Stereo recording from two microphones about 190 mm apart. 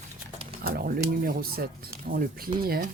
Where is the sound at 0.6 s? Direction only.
50° right (ahead or behind).